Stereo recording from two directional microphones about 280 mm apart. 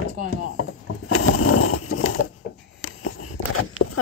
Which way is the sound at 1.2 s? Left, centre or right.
Left.